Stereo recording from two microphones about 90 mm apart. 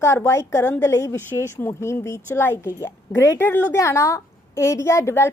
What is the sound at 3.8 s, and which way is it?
A woman's voice, 35° left (ahead or behind).